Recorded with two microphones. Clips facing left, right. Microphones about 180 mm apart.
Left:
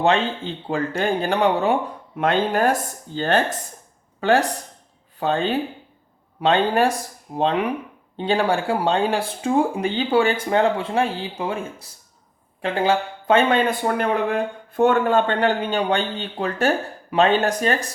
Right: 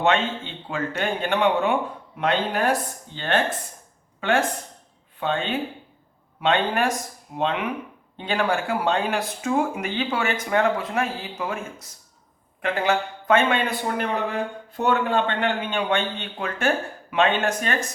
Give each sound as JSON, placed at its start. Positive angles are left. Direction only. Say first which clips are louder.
{"t": 0.0, "sound": "speech", "louder": "left 2 dB", "side_deg": 35}
{"t": 13.7, "sound": "a man's voice", "louder": "left 5 dB", "side_deg": 55}